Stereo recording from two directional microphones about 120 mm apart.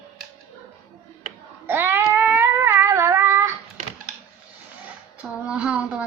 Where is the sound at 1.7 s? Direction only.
20° right (ahead or behind).